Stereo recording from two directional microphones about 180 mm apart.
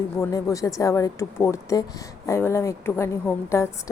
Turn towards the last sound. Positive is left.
turn(degrees=15)  # may be behind; listen again after turning